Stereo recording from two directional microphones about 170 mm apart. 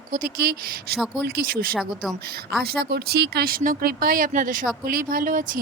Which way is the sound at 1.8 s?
5° right (ahead or behind).